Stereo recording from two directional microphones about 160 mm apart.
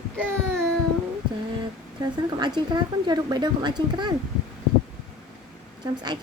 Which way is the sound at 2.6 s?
25° right (ahead or behind).